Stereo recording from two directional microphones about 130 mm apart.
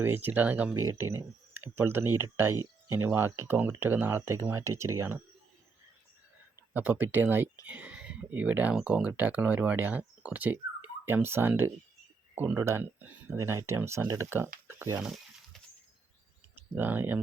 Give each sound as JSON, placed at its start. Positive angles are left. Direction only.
{"t": 0.0, "sound": "speech", "side_deg": -15}
{"t": 6.7, "sound": "speech", "side_deg": -15}
{"t": 7.7, "sound": "a sound", "side_deg": -10}
{"t": 8.7, "sound": "speech", "side_deg": -10}
{"t": 15.0, "sound": "a sound", "side_deg": 0}
{"t": 16.7, "sound": "speech", "side_deg": -15}